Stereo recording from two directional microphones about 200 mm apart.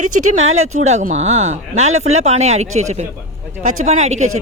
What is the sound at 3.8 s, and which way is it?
Speech, 35° right (ahead or behind).